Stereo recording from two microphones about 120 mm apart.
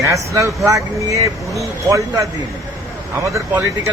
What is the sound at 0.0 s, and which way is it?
Speech, 25° right (ahead or behind).